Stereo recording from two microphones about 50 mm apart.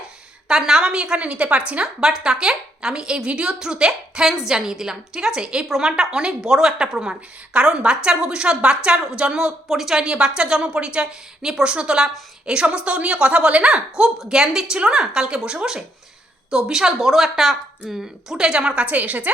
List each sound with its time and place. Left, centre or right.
0.4 s a woman's voice: centre
9.6 s a woman's voice: centre
18.9 s a woman's voice: right